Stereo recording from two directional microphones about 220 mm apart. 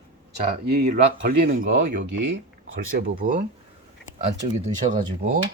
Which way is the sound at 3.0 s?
40° right (ahead or behind).